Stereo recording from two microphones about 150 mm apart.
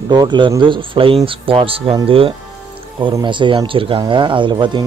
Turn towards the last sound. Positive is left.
turn(degrees=-30)  # may be behind; listen again after turning